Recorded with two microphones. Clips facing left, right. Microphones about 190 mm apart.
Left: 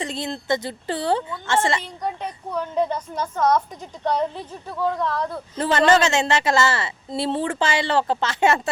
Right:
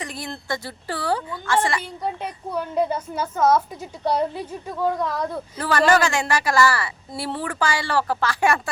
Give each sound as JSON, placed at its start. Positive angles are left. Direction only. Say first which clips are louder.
{"t": 0.0, "sound": "a woman's voice", "louder": "left 4 dB", "side_deg": 25}
{"t": 2.5, "sound": "a woman's voice", "louder": "even", "side_deg": -10}
{"t": 5.5, "sound": "a woman's voice", "louder": "left 1 dB", "side_deg": 25}